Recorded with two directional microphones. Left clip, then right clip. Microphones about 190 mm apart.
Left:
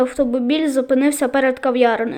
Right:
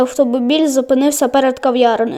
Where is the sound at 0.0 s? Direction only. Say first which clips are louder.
Right 4 dB; 25° right (ahead or behind).